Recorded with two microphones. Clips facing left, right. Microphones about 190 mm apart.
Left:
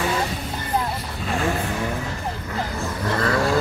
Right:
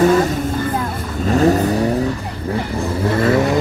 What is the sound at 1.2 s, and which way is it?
Vehicle, 40° right (ahead or behind).